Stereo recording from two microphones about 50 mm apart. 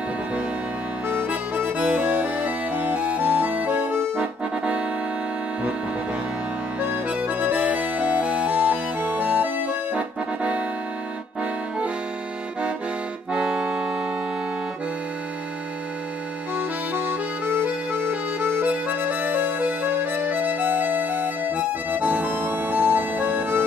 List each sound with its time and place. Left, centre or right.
1.0 s music: right
4.2 s accordion: right
7.2 s music: right
13.3 s accordion: centre
16.5 s music: right
18.9 s music: right